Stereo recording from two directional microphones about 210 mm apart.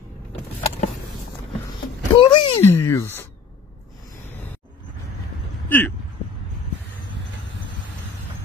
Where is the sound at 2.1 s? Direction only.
20° left (ahead or behind).